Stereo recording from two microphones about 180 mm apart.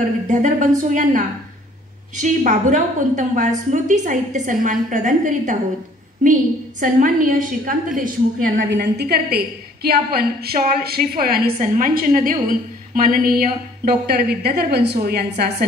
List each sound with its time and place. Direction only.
0.3 s a woman's voice: 45° right (ahead or behind)
8.6 s a woman's voice: 65° right (ahead or behind)